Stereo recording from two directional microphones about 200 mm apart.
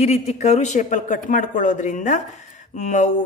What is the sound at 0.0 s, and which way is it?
A woman's voice, 35° left (ahead or behind).